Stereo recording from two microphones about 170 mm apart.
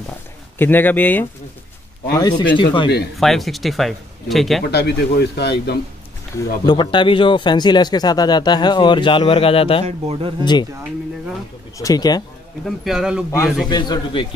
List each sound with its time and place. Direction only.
0.6 s speech: 10° left (ahead or behind)
2.1 s speech: 25° left (ahead or behind)
3.2 s speech: centre (ahead or behind)
4.6 s speech: 75° left (ahead or behind)
6.3 s speech: 25° left (ahead or behind)
9.8 s speech: 35° right (ahead or behind)
10.4 s speech: 25° left (ahead or behind)
11.8 s speech: 20° left (ahead or behind)
12.6 s speech: centre (ahead or behind)
13.7 s speech: 25° left (ahead or behind)